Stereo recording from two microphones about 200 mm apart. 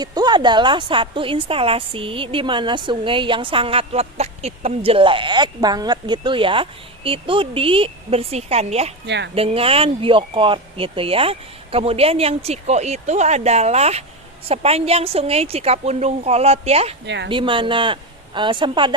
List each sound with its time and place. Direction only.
0.0 s a woman's voice: 20° right (ahead or behind)
9.0 s speech: 60° right (ahead or behind)
9.3 s a woman's voice: 30° right (ahead or behind)